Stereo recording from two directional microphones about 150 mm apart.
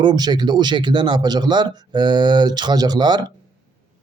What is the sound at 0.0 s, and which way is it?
Speech, 30° right (ahead or behind).